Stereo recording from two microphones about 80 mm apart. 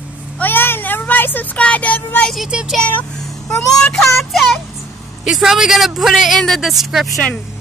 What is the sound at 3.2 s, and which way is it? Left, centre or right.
Speech, centre.